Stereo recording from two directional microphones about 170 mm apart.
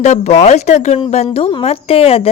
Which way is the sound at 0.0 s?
40° left (ahead or behind).